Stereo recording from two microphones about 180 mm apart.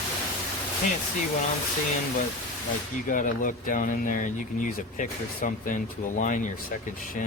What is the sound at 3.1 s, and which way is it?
Speech, 50° left (ahead or behind).